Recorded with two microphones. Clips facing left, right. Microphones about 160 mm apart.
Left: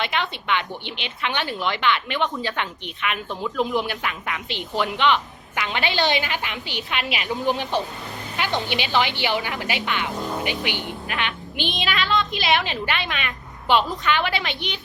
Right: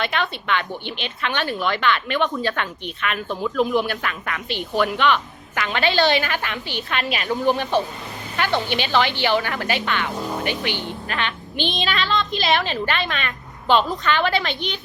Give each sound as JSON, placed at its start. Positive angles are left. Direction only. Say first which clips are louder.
{"t": 0.0, "sound": "a woman's voice", "louder": "right 2 dB", "side_deg": 20}
{"t": 8.4, "sound": "a woman's voice", "louder": "right 3 dB", "side_deg": 20}
{"t": 10.2, "sound": "speech", "louder": "right 1 dB", "side_deg": 0}
{"t": 10.4, "sound": "a woman's voice", "louder": "right 2 dB", "side_deg": 15}
{"t": 12.6, "sound": "a woman's voice", "louder": "right 3 dB", "side_deg": 15}